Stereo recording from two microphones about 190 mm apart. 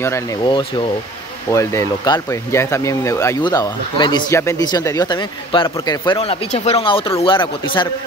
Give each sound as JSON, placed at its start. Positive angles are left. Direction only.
{"t": 0.5, "sound": "speech", "side_deg": 25}
{"t": 1.5, "sound": "speech", "side_deg": 15}